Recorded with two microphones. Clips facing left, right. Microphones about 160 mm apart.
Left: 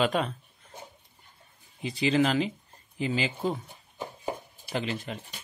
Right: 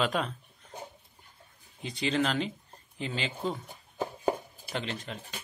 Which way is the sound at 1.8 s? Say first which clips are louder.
Left 4 dB; 5° left (ahead or behind).